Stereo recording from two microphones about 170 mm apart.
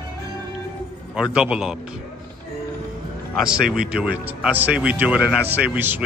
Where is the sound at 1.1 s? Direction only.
5° right (ahead or behind).